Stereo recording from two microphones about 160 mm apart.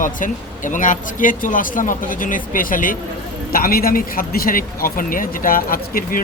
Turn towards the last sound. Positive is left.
turn(degrees=65)  # may be behind; listen again after turning